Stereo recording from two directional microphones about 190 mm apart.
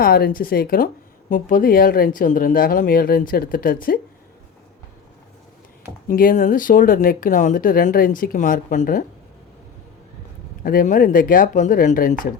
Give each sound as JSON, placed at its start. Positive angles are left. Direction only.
{"t": 0.0, "sound": "a woman's voice", "side_deg": 50}
{"t": 6.1, "sound": "a woman's voice", "side_deg": 45}
{"t": 10.6, "sound": "a woman's voice", "side_deg": 45}